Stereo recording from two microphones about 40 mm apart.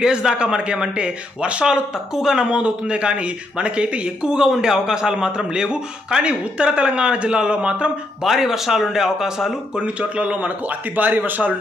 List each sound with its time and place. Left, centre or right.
0.0 s a man's voice: centre
2.1 s speech: centre
2.5 s a man's voice: right
8.2 s speech: centre
9.8 s speech: right
11.0 s speech: right